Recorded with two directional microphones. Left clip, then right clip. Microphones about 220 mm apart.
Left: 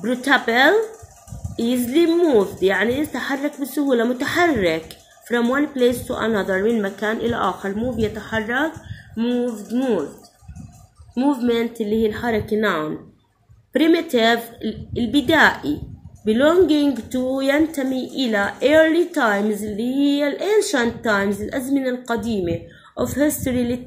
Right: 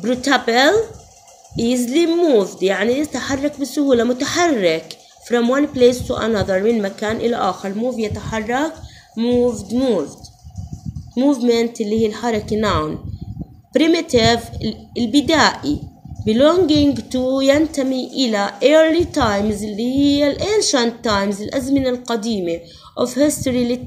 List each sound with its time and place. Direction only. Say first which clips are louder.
0.0 s a woman's voice: right 1 dB; 25° right (ahead or behind)
11.1 s a woman's voice: right 4 dB; 20° right (ahead or behind)